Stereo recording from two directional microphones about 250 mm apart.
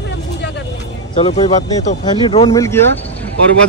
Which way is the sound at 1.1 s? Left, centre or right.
Left.